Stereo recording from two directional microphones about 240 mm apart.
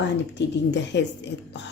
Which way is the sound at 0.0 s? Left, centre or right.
Left.